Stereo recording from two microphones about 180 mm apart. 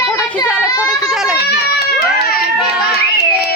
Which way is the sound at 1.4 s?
65° left (ahead or behind).